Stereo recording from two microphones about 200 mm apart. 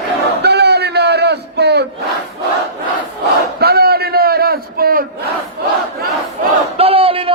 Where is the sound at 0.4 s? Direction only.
55° right (ahead or behind).